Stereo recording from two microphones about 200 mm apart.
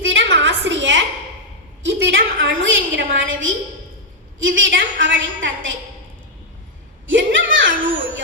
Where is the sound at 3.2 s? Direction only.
75° right (ahead or behind).